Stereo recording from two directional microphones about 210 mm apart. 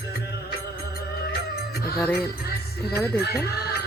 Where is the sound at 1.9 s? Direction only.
10° left (ahead or behind).